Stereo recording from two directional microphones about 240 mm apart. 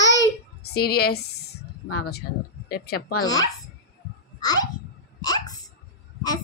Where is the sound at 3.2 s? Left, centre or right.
Centre.